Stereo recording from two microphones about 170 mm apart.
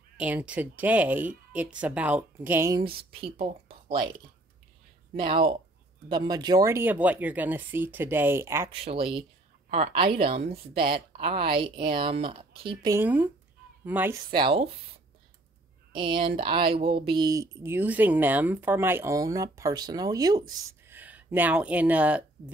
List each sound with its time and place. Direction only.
0.2 s speech: 10° right (ahead or behind)
2.7 s speech: 30° right (ahead or behind)
5.1 s speech: 30° right (ahead or behind)
8.7 s speech: 35° right (ahead or behind)
12.9 s speech: 10° right (ahead or behind)
14.3 s speech: 30° right (ahead or behind)
15.9 s speech: 30° right (ahead or behind); by 22.2 s 10° right (ahead or behind)